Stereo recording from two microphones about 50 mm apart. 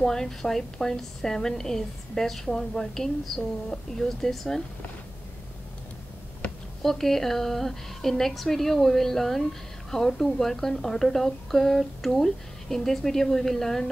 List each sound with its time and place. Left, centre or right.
0.0 s a woman's voice: centre
6.4 s a sound: left
6.8 s a woman's voice: centre